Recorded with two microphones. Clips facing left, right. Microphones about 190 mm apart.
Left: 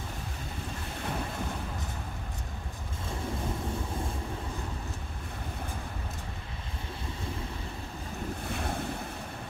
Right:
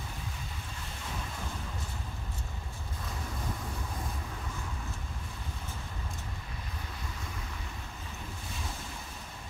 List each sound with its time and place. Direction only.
8.5 s waves: 60° left (ahead or behind)